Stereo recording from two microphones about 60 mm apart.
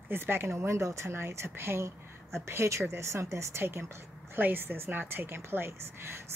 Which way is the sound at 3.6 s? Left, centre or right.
Right.